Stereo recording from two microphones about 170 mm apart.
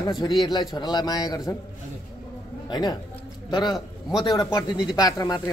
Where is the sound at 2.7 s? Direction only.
25° left (ahead or behind).